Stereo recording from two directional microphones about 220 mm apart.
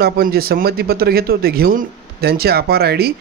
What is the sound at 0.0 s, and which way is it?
Speech, 45° right (ahead or behind).